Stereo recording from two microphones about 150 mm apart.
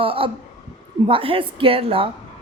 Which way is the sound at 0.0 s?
35° right (ahead or behind).